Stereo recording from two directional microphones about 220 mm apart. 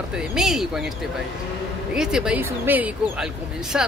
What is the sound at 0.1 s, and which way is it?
Speech, 5° right (ahead or behind).